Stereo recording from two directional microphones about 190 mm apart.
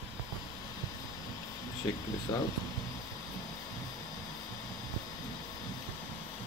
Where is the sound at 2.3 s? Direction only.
20° left (ahead or behind).